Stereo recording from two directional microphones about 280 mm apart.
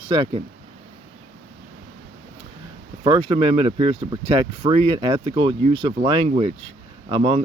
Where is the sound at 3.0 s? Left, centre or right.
Centre.